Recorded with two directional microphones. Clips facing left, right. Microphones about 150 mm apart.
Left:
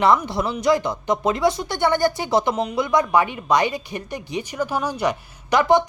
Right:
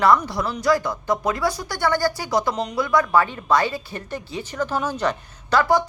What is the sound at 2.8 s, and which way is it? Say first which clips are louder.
Speech: even; 20° left (ahead or behind).